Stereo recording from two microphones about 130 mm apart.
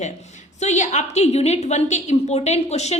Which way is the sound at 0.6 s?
65° left (ahead or behind).